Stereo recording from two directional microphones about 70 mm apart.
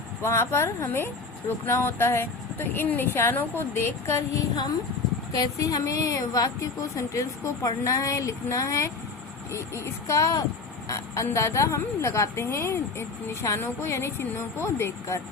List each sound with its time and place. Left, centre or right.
0.2 s speech: left
5.4 s a woman's voice: left